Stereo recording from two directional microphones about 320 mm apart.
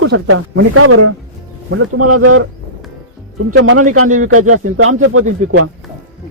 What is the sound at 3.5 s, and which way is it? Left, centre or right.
Speech, right.